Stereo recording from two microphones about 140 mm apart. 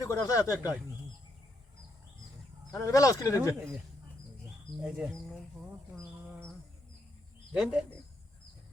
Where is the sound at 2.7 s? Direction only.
25° left (ahead or behind).